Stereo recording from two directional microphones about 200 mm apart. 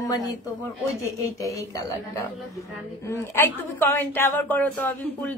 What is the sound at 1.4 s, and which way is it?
A woman's voice, 15° left (ahead or behind).